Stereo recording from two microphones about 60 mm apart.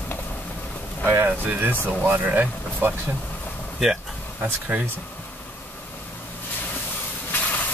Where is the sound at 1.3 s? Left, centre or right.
Right.